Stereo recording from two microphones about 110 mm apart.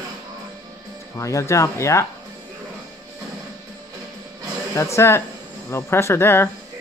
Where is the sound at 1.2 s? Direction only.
30° left (ahead or behind).